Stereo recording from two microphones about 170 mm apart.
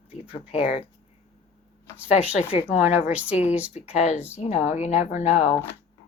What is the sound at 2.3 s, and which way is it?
Speech, 40° left (ahead or behind).